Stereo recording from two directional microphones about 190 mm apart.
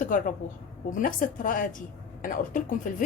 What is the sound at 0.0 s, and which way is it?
A woman's voice, 45° left (ahead or behind).